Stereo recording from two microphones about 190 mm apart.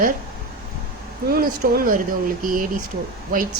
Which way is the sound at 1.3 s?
50° right (ahead or behind).